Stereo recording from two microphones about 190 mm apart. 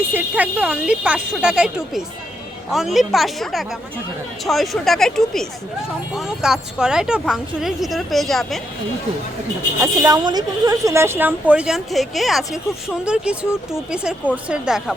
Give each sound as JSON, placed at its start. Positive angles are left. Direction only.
{"t": 0.1, "sound": "a woman's voice", "side_deg": -10}
{"t": 9.8, "sound": "a woman's voice", "side_deg": -20}